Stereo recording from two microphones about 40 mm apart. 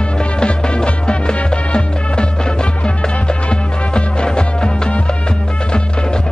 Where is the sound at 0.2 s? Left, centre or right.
Left.